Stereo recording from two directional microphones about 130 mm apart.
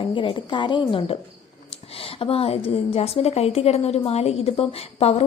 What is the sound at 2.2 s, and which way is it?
A woman's voice, 50° left (ahead or behind).